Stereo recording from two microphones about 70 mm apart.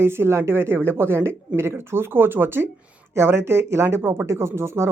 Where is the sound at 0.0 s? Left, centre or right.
Right.